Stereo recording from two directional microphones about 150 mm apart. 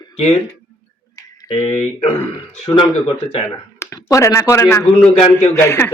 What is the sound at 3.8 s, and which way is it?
A man's voice, 20° left (ahead or behind).